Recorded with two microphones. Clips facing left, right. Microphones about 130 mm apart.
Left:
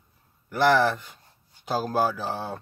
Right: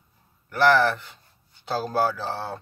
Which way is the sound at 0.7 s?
15° left (ahead or behind).